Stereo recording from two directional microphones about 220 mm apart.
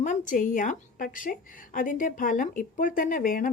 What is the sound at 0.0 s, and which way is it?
A woman's voice, 35° left (ahead or behind).